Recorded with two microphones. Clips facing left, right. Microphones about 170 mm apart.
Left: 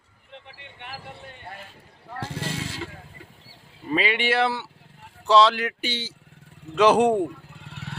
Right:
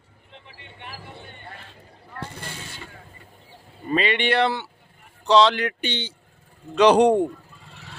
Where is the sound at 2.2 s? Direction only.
90° left.